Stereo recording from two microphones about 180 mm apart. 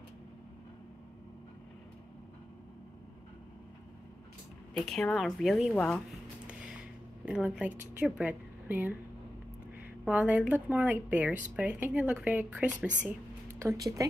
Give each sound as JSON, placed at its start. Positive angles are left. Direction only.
{"t": 4.8, "sound": "a woman's voice", "side_deg": 5}
{"t": 6.4, "sound": "a sound", "side_deg": -5}
{"t": 10.0, "sound": "a woman's voice", "side_deg": -10}